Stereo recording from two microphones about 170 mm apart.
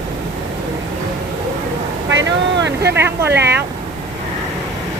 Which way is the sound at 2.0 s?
90° right.